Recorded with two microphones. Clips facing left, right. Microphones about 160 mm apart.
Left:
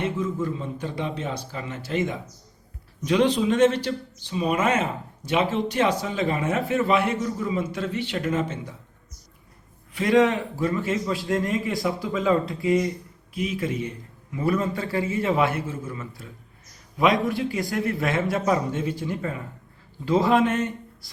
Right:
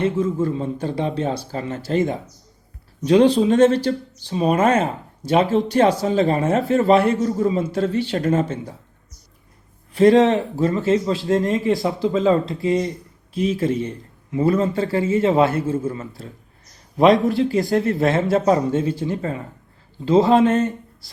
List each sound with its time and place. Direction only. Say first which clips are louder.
0.0 s speech: right 6 dB; 30° right (ahead or behind)
9.9 s a man's voice: right 6 dB; 35° right (ahead or behind)